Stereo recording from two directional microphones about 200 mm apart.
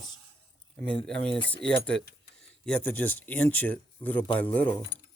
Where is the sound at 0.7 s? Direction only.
5° left (ahead or behind).